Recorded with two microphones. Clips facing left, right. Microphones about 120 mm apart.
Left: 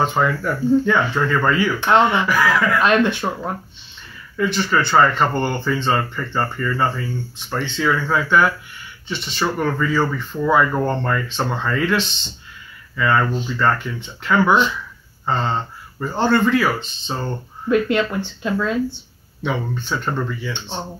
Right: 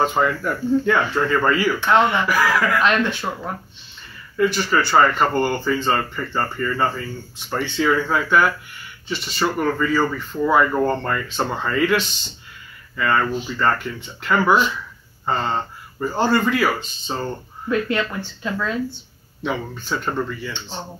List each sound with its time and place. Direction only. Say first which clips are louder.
0.0 s speech: even; centre (ahead or behind)
2.8 s speech: left 3 dB; 20° left (ahead or behind)
4.4 s speech: even; 5° right (ahead or behind)
7.4 s speech: right 1 dB; 10° right (ahead or behind)
17.6 s speech: left 4 dB; 20° left (ahead or behind)
19.4 s speech: left 2 dB; centre (ahead or behind)